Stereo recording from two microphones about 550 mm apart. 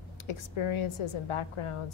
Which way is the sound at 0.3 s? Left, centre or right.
Left.